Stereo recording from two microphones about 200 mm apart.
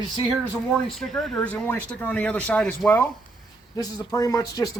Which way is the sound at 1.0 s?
Centre (ahead or behind).